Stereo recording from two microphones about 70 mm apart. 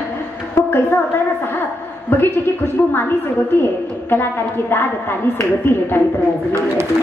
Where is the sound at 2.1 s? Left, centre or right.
Left.